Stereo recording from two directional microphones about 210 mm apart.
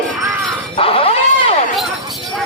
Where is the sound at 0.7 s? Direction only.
25° left (ahead or behind).